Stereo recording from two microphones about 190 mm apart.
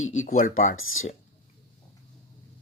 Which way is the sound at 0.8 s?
90° left.